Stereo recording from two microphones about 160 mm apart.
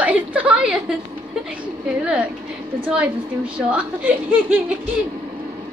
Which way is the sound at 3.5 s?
5° right (ahead or behind).